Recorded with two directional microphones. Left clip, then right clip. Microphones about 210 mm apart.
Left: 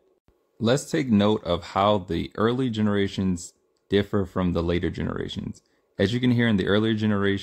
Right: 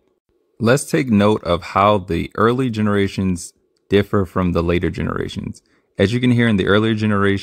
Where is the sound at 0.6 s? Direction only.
30° right (ahead or behind).